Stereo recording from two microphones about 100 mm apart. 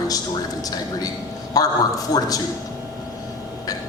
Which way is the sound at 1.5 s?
40° left (ahead or behind).